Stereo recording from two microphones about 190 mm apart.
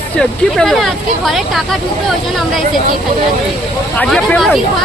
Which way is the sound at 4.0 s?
5° left (ahead or behind).